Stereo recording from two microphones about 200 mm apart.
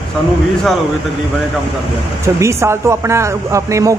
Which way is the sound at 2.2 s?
15° right (ahead or behind).